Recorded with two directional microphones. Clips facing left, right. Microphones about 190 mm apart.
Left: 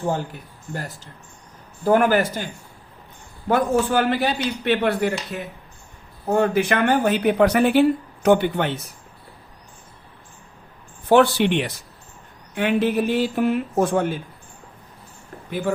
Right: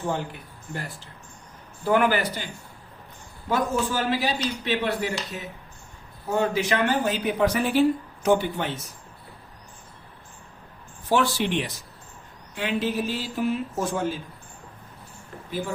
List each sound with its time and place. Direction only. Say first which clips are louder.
0.7 s speech: left 3 dB; 40° left (ahead or behind)
3.5 s speech: left 6 dB; 60° left (ahead or behind)
11.1 s speech: left 7 dB; 60° left (ahead or behind)
15.4 s speech: left 6 dB; 60° left (ahead or behind)